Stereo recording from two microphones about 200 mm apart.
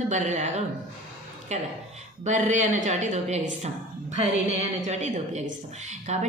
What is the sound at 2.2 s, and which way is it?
A woman's voice, 35° right (ahead or behind).